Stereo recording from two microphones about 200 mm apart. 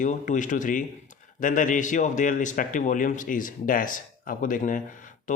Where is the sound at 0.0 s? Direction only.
40° left (ahead or behind).